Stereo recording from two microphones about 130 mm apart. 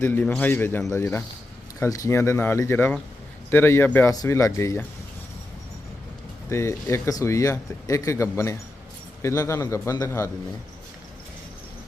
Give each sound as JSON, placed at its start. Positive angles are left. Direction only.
{"t": 0.0, "sound": "speech", "side_deg": 15}
{"t": 6.5, "sound": "speech", "side_deg": 20}